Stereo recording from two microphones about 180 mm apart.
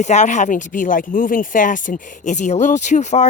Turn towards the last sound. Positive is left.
turn(degrees=40)  # may be behind; listen again after turning